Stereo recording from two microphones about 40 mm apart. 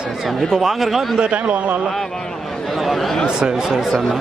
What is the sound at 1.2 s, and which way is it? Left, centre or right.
Speech, right.